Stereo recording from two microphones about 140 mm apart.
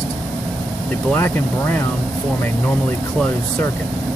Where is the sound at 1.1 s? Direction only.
15° left (ahead or behind).